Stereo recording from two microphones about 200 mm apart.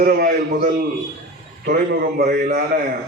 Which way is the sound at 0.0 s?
45° right (ahead or behind).